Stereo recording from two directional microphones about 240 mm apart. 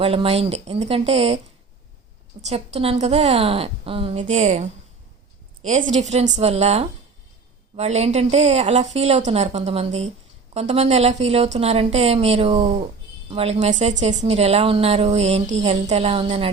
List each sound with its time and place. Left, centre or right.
0.0 s a woman's voice: right
2.5 s a woman's voice: right